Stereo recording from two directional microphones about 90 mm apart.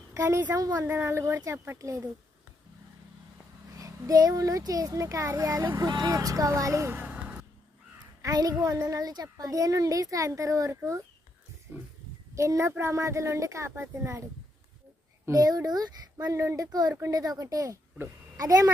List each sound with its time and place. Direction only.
0.1 s a woman's voice: 35° right (ahead or behind)
0.9 s a child's voice: 25° right (ahead or behind)
3.8 s a child's voice: 40° right (ahead or behind)
5.8 s speech: 45° right (ahead or behind); by 7.4 s 15° right (ahead or behind)
8.2 s a child's voice: 45° right (ahead or behind)
11.7 s speech: 20° right (ahead or behind)
12.3 s a child's voice: 35° right (ahead or behind)
15.3 s a child's voice: 40° right (ahead or behind)
16.6 s a child's voice: 45° right (ahead or behind)